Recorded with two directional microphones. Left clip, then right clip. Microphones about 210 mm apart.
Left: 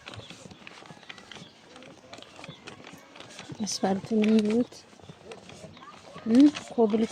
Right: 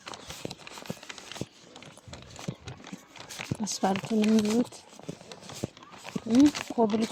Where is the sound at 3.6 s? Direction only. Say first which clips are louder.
Even; 20° right (ahead or behind).